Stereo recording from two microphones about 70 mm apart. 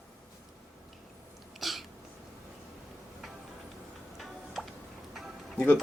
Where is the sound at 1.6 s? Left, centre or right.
Centre.